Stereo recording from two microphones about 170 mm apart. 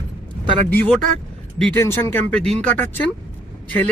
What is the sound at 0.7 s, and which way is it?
Speech, 10° left (ahead or behind).